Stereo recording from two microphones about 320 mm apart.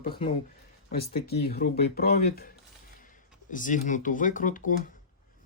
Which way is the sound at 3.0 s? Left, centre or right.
Left.